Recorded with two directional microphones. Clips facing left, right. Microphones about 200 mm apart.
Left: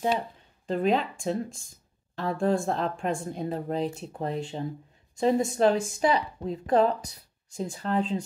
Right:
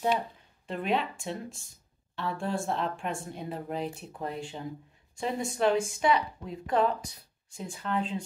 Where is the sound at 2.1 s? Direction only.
40° left (ahead or behind).